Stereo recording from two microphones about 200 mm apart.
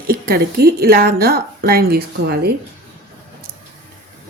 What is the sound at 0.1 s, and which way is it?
A woman's voice, 50° right (ahead or behind).